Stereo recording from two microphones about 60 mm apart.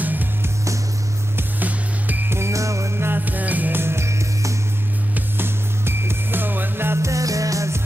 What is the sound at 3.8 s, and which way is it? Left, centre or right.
Music, right.